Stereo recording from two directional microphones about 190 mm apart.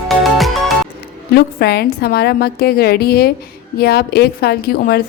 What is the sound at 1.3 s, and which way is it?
A woman's voice, 55° left (ahead or behind).